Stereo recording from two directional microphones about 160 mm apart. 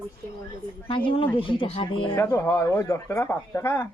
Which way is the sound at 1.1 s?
35° left (ahead or behind).